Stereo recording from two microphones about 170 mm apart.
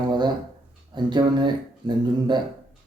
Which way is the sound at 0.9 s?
25° right (ahead or behind).